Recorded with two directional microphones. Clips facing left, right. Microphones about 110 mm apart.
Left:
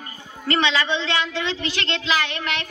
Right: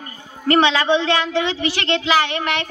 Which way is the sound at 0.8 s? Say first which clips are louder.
Right 6 dB; 50° right (ahead or behind).